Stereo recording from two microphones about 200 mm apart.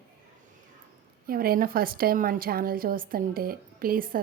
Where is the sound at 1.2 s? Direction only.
45° right (ahead or behind).